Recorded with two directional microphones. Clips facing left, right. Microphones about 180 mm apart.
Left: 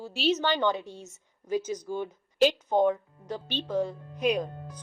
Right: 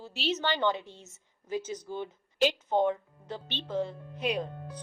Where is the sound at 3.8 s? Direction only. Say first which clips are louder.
Left 3 dB; 20° right (ahead or behind).